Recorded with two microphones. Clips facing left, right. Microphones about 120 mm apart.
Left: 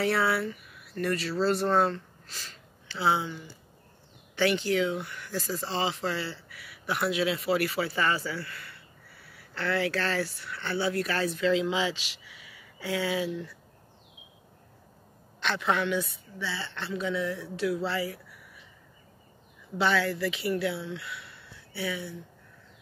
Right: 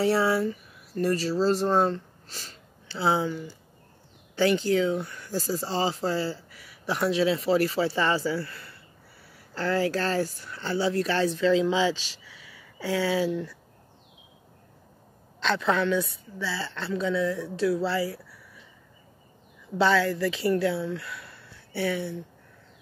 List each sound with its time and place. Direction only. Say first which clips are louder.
0.0 s speech: right 4 dB; 35° right (ahead or behind)
1.7 s speech: right 2 dB; 25° right (ahead or behind)
2.2 s sniff: right 2 dB; 40° right (ahead or behind)
4.4 s speech: right 3 dB; 35° right (ahead or behind)
15.8 s speech: right 4 dB; 20° left (ahead or behind)
17.6 s speech: right 4 dB; 30° right (ahead or behind)
20.0 s speech: right 4 dB; 35° right (ahead or behind)
21.2 s a sound: right 2 dB; 45° right (ahead or behind)